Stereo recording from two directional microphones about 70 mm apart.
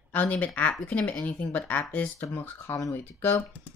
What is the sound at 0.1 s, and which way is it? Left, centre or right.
Speech, left.